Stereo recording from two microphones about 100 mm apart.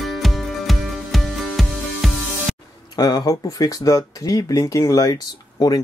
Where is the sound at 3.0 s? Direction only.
35° left (ahead or behind).